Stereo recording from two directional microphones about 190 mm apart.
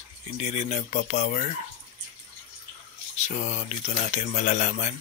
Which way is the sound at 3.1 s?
35° left (ahead or behind).